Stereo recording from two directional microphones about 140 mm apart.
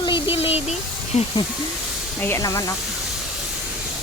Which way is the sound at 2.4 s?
25° left (ahead or behind).